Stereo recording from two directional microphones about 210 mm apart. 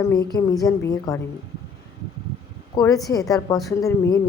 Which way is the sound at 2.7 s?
15° left (ahead or behind).